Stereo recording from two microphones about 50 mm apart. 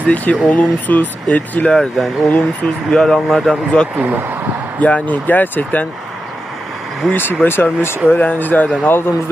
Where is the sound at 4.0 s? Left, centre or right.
Right.